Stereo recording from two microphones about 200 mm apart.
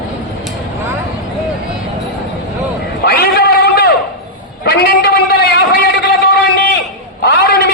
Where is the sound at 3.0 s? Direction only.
50° left (ahead or behind).